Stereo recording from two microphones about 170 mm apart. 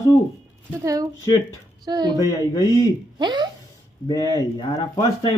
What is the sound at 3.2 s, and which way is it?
Speech, 25° right (ahead or behind).